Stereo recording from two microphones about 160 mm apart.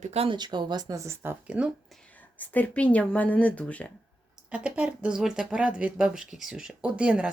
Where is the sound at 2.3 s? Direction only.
10° left (ahead or behind).